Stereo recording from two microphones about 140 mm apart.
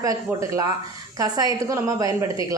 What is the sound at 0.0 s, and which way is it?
A woman's voice, 25° right (ahead or behind).